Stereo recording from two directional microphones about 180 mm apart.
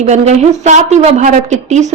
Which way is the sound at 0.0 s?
40° right (ahead or behind).